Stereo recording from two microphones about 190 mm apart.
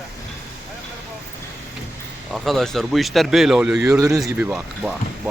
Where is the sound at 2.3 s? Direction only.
Centre (ahead or behind).